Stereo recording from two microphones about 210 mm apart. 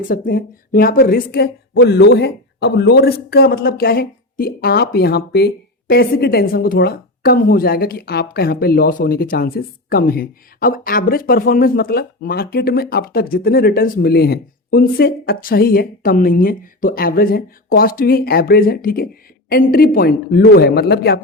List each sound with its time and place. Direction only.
0.1 s a woman's voice: 40° left (ahead or behind)